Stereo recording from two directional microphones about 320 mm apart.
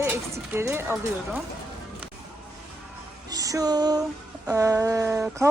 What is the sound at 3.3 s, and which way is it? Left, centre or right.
Music, centre.